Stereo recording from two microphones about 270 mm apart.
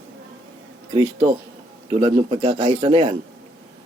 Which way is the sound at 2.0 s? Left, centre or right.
Right.